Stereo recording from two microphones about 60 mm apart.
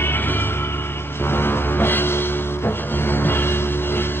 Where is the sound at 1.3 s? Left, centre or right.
Left.